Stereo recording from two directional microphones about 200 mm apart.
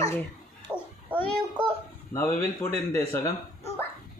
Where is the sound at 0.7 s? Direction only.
5° right (ahead or behind).